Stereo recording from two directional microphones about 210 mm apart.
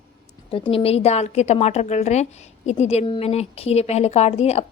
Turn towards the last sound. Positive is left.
turn(degrees=30)  # may be behind; listen again after turning